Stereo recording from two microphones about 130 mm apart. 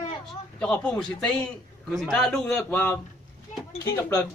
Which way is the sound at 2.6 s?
15° left (ahead or behind).